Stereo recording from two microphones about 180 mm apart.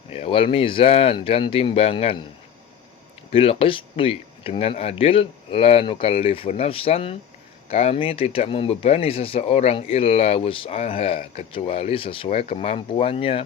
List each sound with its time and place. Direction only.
0.1 s speech: 30° left (ahead or behind)
3.3 s speech: 30° left (ahead or behind)